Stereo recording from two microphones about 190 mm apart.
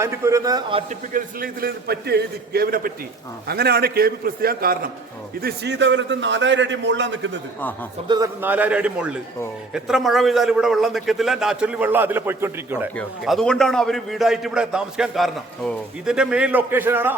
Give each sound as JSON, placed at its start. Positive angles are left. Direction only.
{"t": 0.0, "sound": "a man's voice", "side_deg": -15}
{"t": 1.1, "sound": "a man's voice", "side_deg": -50}
{"t": 8.0, "sound": "a man's voice", "side_deg": -20}
{"t": 8.4, "sound": "a man's voice", "side_deg": -10}
{"t": 13.0, "sound": "a man's voice", "side_deg": 0}